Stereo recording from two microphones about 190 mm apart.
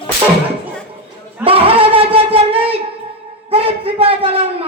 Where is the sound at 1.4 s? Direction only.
30° right (ahead or behind).